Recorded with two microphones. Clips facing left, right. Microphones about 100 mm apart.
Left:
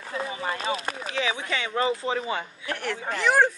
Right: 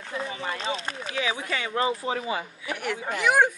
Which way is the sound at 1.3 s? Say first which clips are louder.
Left 1 dB; 40° right (ahead or behind).